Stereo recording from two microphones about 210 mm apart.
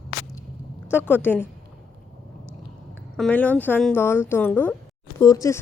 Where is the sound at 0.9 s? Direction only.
10° left (ahead or behind).